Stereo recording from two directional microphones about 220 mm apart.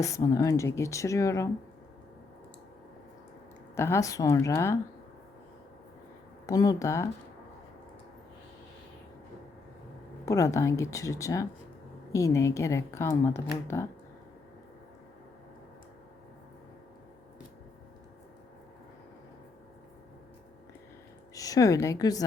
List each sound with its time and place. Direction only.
0.0 s speech: 15° left (ahead or behind)
3.8 s speech: 10° left (ahead or behind)
6.4 s speech: 15° left (ahead or behind)
10.2 s speech: 15° left (ahead or behind)
21.3 s a woman's voice: 15° left (ahead or behind)